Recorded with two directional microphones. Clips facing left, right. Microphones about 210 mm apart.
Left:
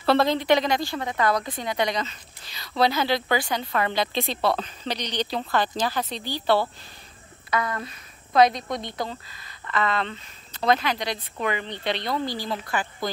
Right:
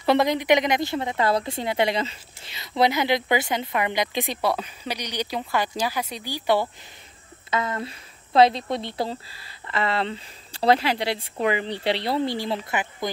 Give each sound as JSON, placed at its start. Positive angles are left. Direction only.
{"t": 0.0, "sound": "speech", "side_deg": -15}